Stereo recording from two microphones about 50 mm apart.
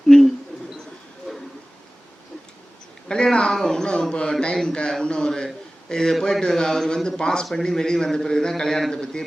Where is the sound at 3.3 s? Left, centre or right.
Centre.